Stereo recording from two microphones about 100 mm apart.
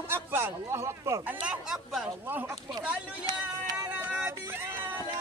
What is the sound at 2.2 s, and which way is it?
Speech, 20° right (ahead or behind).